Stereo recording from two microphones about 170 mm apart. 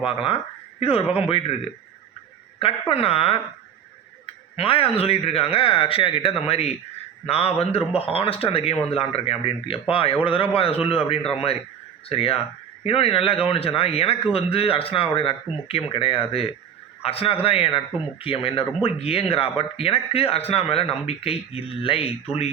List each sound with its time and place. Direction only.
0.0 s speech: 30° left (ahead or behind)
2.9 s speech: 35° left (ahead or behind)
4.5 s speech: 30° left (ahead or behind)